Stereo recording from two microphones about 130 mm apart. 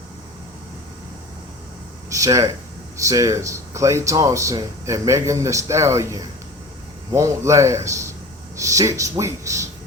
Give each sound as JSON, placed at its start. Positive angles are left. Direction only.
{"t": 2.0, "sound": "speech", "side_deg": -25}